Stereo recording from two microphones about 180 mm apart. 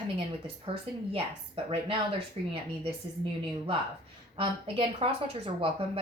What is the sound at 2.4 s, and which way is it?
Speech, 35° right (ahead or behind).